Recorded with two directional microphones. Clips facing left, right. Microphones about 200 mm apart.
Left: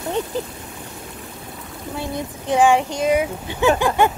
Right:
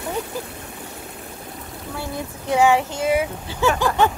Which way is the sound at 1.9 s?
20° left (ahead or behind).